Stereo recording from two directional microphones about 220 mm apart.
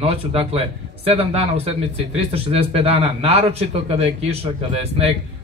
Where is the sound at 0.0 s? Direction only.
25° right (ahead or behind).